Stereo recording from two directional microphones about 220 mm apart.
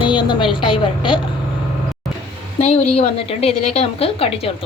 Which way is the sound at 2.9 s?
25° left (ahead or behind).